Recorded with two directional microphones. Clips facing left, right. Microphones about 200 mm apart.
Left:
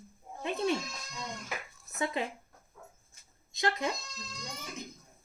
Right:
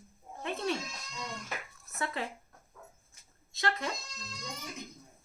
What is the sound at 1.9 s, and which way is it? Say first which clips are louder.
Speech: left 3 dB; 15° left (ahead or behind).